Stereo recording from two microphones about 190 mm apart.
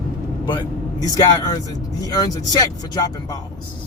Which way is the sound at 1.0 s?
20° left (ahead or behind).